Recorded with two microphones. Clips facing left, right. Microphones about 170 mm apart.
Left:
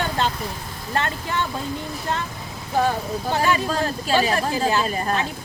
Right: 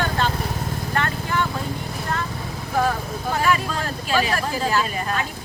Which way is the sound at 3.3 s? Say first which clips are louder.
Even; 25° left (ahead or behind).